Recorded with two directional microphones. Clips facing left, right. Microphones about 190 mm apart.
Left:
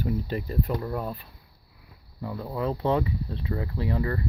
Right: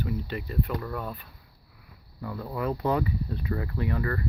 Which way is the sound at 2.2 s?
20° left (ahead or behind).